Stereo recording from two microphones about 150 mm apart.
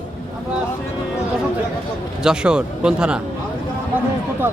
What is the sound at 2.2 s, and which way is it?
Speech, 5° right (ahead or behind).